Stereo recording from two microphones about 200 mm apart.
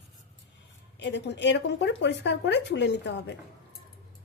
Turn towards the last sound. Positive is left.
turn(degrees=60)  # may be behind; listen again after turning